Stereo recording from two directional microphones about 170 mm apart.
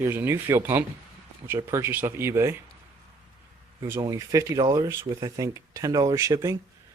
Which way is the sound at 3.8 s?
20° right (ahead or behind).